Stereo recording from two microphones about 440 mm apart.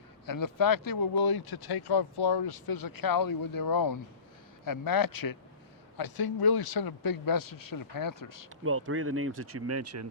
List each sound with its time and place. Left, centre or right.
0.3 s speech: left
8.6 s speech: right